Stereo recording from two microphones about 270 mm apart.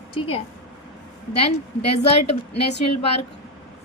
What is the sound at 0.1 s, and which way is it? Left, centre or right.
Speech, centre.